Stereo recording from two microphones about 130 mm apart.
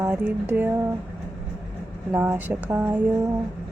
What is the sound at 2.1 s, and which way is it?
Speech, 15° right (ahead or behind).